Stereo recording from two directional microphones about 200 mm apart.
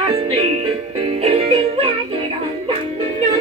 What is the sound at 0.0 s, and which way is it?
Music, 30° right (ahead or behind).